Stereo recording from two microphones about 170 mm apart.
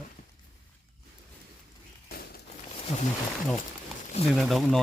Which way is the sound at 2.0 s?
65° left (ahead or behind).